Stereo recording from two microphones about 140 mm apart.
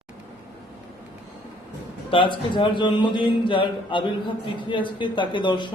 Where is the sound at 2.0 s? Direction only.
35° left (ahead or behind).